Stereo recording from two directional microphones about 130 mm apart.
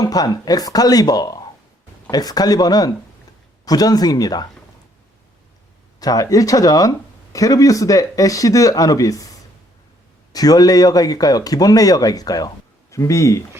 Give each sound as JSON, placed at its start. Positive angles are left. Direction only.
{"t": 0.0, "sound": "speech", "side_deg": 30}
{"t": 6.0, "sound": "speech", "side_deg": 30}
{"t": 10.3, "sound": "speech", "side_deg": 30}